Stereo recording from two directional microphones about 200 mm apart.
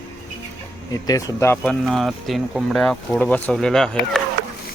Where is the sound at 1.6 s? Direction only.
Centre (ahead or behind).